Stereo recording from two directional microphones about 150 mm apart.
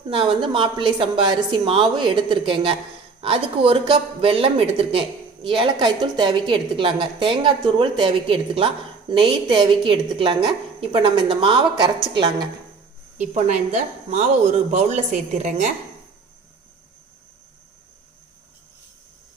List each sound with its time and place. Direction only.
0.1 s speech: 35° right (ahead or behind)
13.1 s a woman's voice: 50° right (ahead or behind)